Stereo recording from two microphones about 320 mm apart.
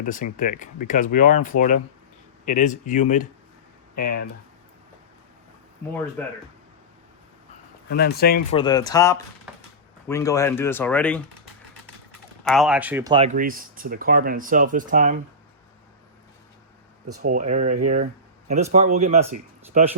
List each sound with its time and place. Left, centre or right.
0.0 s speech: left
7.9 s speech: left
8.4 s speech: centre
12.5 s speech: centre
13.1 s speech: right
17.2 s speech: right